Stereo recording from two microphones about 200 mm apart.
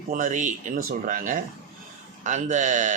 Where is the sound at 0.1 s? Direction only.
40° right (ahead or behind).